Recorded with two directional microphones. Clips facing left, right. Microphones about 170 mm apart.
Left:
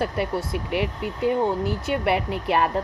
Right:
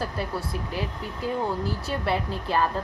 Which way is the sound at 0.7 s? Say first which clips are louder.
Left 6 dB; 70° left (ahead or behind).